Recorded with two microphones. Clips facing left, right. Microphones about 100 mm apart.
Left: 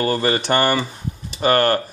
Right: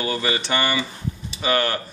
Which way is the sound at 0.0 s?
45° left (ahead or behind).